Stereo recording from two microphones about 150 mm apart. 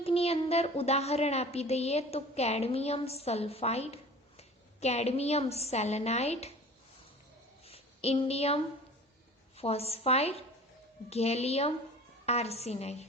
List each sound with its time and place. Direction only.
0.0 s a child's voice: 40° left (ahead or behind)
7.6 s a sound: 40° left (ahead or behind)
9.6 s a child's voice: 40° left (ahead or behind)